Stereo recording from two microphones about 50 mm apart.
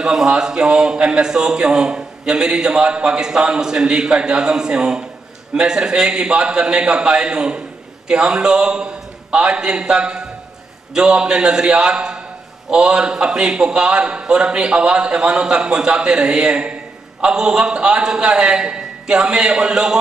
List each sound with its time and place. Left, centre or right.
0.0 s a man's voice: centre